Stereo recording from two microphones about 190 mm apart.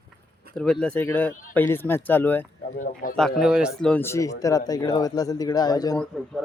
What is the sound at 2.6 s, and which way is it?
Speech, 45° left (ahead or behind).